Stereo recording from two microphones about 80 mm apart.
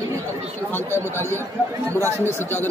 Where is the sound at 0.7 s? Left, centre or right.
Left.